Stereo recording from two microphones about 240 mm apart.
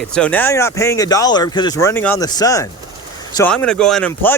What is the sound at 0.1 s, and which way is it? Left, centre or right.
Speech, centre.